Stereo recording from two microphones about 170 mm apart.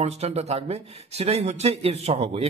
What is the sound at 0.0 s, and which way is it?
A man's voice, 40° right (ahead or behind).